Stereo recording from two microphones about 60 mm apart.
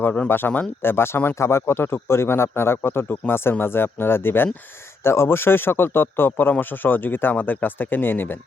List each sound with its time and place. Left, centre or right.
0.0 s speech: left
0.3 s speech: left